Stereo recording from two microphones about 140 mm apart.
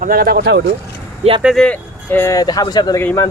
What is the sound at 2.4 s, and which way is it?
Speech, 30° left (ahead or behind).